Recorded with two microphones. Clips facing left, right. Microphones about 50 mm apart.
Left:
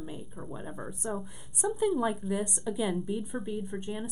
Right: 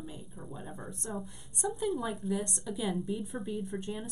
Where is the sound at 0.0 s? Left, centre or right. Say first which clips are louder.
Left 4 dB; left.